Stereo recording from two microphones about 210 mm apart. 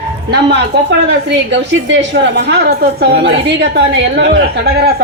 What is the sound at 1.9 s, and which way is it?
A woman's voice, 60° right (ahead or behind).